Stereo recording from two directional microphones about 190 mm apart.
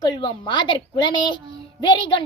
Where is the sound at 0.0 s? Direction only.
25° left (ahead or behind).